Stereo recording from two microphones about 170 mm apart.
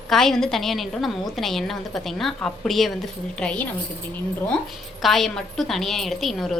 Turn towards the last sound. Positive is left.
turn(degrees=0)  # may be behind; listen again after turning